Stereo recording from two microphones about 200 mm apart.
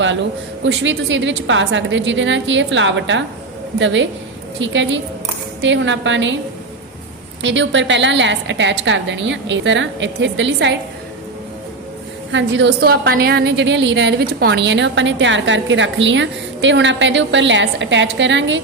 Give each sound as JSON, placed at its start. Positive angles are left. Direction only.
{"t": 0.0, "sound": "a woman's voice", "side_deg": -70}
{"t": 7.4, "sound": "a woman's voice", "side_deg": -65}
{"t": 12.3, "sound": "a woman's voice", "side_deg": -65}